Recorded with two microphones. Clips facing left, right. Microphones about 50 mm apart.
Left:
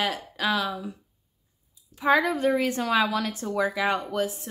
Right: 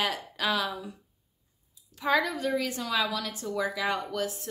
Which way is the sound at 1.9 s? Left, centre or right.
Left.